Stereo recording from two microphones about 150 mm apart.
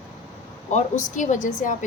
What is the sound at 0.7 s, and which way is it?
A woman's voice, 55° left (ahead or behind).